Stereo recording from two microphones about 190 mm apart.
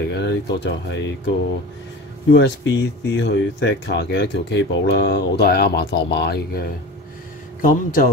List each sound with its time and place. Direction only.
0.1 s speech: 65° left (ahead or behind)
2.3 s speech: 65° left (ahead or behind)
7.6 s speech: 45° left (ahead or behind)